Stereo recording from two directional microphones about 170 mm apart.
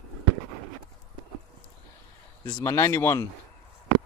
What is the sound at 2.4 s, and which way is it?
Speech, 20° left (ahead or behind).